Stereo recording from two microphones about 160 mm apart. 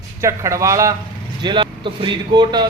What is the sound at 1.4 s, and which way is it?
Speech, 30° right (ahead or behind).